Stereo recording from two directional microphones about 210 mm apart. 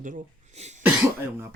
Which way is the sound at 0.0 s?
40° right (ahead or behind).